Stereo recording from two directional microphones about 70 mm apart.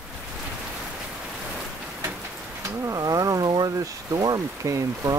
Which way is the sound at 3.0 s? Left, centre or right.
Right.